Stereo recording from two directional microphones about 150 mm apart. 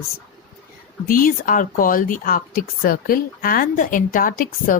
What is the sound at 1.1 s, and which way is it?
Speech, 65° left (ahead or behind).